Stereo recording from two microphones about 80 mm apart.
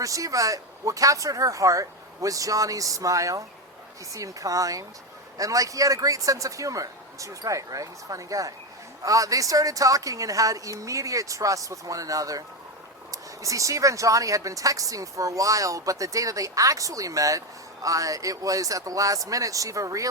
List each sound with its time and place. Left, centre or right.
0.0 s speech: right